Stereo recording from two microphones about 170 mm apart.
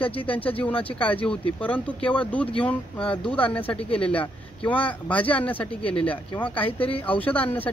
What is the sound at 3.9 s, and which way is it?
Speech, 35° left (ahead or behind).